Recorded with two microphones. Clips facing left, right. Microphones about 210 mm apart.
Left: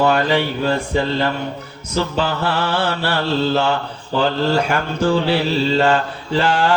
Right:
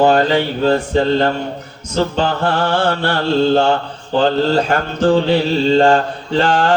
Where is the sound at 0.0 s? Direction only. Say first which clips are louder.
Right 4 dB; 45° right (ahead or behind).